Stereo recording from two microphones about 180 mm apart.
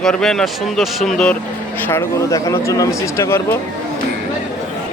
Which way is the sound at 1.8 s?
15° left (ahead or behind).